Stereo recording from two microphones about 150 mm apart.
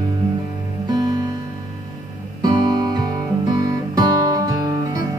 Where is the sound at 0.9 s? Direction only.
25° right (ahead or behind).